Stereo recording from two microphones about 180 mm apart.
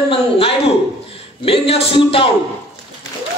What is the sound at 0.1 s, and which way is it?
A man's voice, 30° left (ahead or behind).